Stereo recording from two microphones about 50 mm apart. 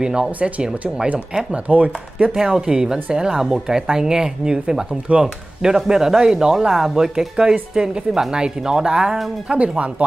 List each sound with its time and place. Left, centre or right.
0.0 s speech: centre
2.3 s speech: centre
9.5 s speech: right